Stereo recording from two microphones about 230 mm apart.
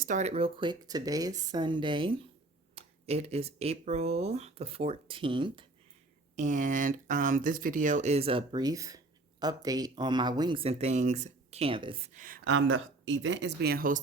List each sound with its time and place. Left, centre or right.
0.0 s speech: right
6.3 s speech: right
12.5 s speech: right